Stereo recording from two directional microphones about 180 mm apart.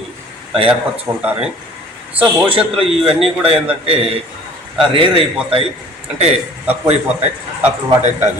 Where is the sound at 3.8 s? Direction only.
30° right (ahead or behind).